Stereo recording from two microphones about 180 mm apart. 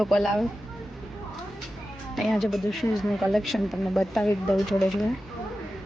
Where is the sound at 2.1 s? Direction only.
Centre (ahead or behind).